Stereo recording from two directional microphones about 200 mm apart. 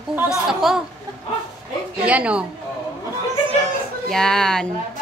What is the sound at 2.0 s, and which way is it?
Speech, 5° right (ahead or behind).